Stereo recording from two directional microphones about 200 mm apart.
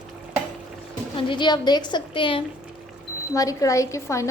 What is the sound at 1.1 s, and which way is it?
A woman's voice, 25° left (ahead or behind).